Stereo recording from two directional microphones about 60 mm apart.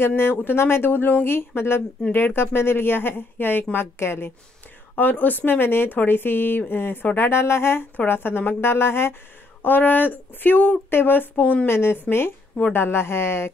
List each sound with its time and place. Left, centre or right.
0.0 s speech: left
4.9 s speech: left